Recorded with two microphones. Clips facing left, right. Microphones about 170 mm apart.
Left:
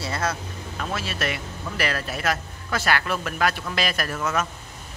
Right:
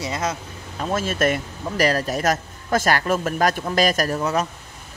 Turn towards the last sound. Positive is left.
turn(degrees=-35)  # may be behind; listen again after turning